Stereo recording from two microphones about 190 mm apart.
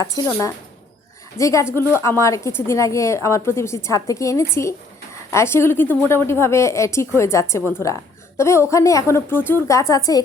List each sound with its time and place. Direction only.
0.0 s a woman's voice: 15° left (ahead or behind)